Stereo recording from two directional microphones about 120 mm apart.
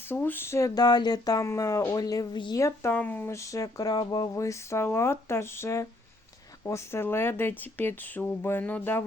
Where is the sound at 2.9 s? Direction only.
15° left (ahead or behind).